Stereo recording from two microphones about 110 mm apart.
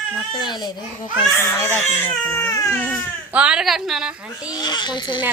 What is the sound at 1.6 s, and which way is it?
Speech, 20° left (ahead or behind).